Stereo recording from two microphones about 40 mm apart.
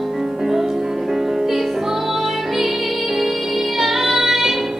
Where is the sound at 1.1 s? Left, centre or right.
Centre.